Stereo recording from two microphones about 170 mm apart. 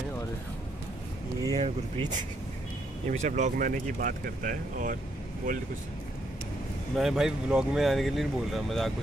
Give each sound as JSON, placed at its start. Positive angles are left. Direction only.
{"t": 1.4, "sound": "speech", "side_deg": -25}
{"t": 3.1, "sound": "speech", "side_deg": -45}
{"t": 7.0, "sound": "speech", "side_deg": 0}